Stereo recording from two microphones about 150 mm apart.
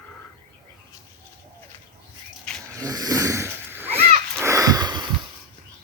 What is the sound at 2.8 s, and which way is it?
Snoring, 25° right (ahead or behind).